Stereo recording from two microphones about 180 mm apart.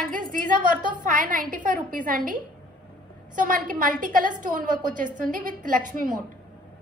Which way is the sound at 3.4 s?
50° right (ahead or behind).